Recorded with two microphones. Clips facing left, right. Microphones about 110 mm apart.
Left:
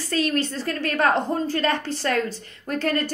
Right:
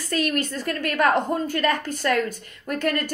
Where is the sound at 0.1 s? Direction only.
30° left (ahead or behind).